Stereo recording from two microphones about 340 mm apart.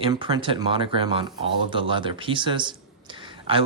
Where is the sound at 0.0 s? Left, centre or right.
Centre.